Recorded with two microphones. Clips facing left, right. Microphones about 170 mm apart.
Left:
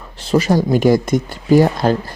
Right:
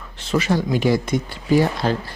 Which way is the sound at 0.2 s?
35° left (ahead or behind).